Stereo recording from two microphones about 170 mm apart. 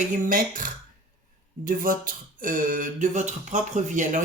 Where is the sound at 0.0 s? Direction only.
50° right (ahead or behind).